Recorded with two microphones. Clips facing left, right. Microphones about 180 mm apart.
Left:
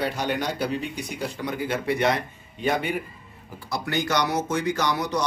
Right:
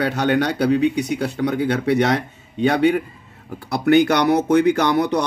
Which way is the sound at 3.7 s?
60° right (ahead or behind).